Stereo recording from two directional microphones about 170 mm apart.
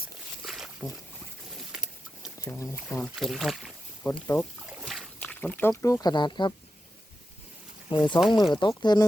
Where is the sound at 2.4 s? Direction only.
15° left (ahead or behind).